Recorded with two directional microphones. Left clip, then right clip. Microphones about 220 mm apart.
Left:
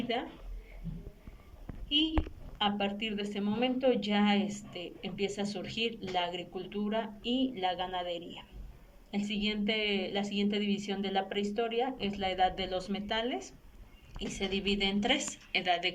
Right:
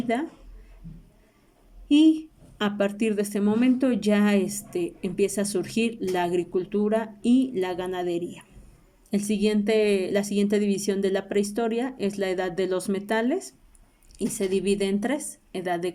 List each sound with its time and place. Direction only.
1.9 s a woman's voice: 60° right (ahead or behind)